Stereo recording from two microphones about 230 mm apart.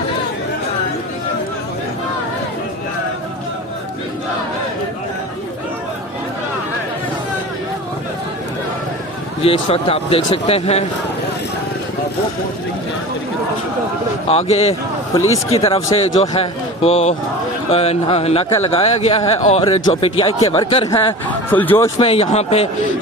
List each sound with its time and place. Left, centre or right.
9.4 s a man's voice: left
14.3 s a man's voice: left
21.5 s speech: centre
21.9 s a man's voice: left